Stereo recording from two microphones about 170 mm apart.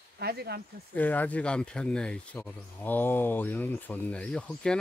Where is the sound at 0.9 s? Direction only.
10° left (ahead or behind).